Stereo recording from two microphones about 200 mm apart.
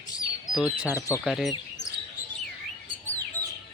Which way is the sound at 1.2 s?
Centre (ahead or behind).